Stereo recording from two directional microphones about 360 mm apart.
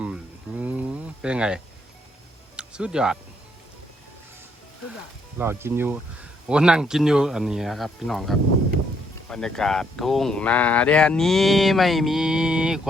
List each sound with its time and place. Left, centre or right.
0.0 s a sound: centre
2.6 s speech: centre
5.4 s speech: centre